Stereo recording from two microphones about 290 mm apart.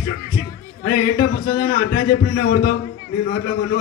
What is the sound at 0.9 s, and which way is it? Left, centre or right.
A man's voice, left.